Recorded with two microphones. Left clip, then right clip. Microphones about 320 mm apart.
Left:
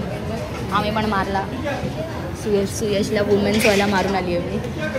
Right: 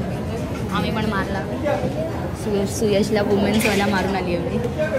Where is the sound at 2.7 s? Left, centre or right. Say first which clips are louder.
Right 1 dB; centre.